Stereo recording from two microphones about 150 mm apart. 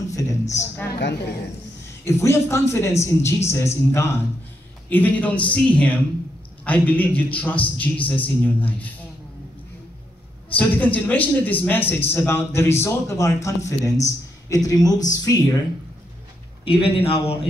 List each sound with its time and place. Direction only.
0.1 s speech: 20° left (ahead or behind)
2.0 s a man's voice: 20° left (ahead or behind)
10.5 s a man's voice: 10° left (ahead or behind)
16.6 s a man's voice: 40° left (ahead or behind)